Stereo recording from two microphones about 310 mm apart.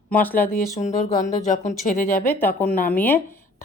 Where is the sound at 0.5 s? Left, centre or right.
Left.